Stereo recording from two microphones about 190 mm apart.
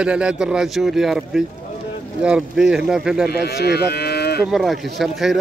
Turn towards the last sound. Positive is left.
turn(degrees=0)  # may be behind; listen again after turning